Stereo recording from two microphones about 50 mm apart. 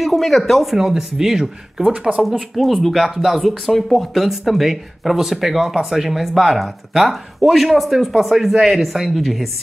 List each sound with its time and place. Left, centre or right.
0.0 s speech: centre
1.9 s speech: right
2.5 s speech: centre